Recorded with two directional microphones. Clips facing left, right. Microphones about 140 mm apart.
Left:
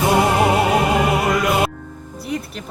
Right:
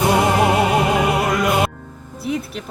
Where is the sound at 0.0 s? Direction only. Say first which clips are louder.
Even; centre (ahead or behind).